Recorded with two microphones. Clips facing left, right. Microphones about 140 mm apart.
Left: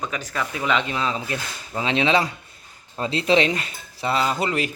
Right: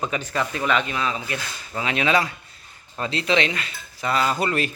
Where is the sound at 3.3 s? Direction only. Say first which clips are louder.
Left 4 dB; 35° left (ahead or behind).